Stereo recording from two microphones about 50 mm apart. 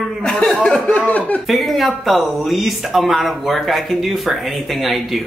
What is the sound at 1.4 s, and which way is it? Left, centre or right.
Speech, centre.